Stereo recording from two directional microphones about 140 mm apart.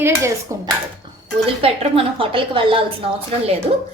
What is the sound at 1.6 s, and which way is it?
Dishes, 40° right (ahead or behind).